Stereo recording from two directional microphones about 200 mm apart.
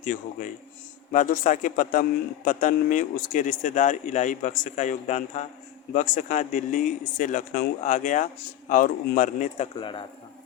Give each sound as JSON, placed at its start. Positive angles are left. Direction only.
{"t": 0.0, "sound": "a man's voice", "side_deg": 40}